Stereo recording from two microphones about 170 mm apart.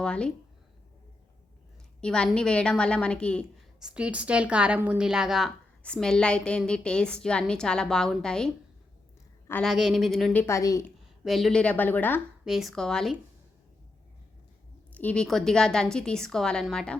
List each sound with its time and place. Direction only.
0.0 s a woman's voice: 5° left (ahead or behind)
2.0 s a woman's voice: 5° left (ahead or behind)
3.8 s a woman's voice: 5° right (ahead or behind)
9.6 s a woman's voice: centre (ahead or behind)
10.4 s speech: 20° left (ahead or behind)
10.8 s a woman's voice: centre (ahead or behind)
12.5 s a woman's voice: centre (ahead or behind)
14.9 s a woman's voice: 5° left (ahead or behind)